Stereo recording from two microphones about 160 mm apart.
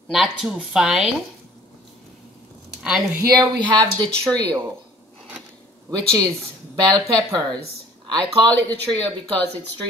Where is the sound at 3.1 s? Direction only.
25° right (ahead or behind).